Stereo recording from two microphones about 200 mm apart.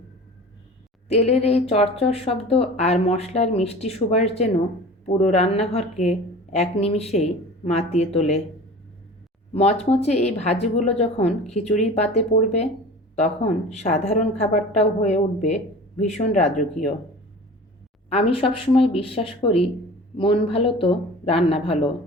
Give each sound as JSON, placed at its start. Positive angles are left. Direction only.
{"t": 1.0, "sound": "speech", "side_deg": 30}
{"t": 9.5, "sound": "speech", "side_deg": 30}
{"t": 18.1, "sound": "speech", "side_deg": 30}